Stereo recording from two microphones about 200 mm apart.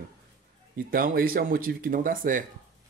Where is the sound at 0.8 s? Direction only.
45° right (ahead or behind).